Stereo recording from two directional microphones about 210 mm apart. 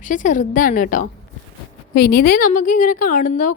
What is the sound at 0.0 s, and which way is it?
A woman's voice, 40° left (ahead or behind).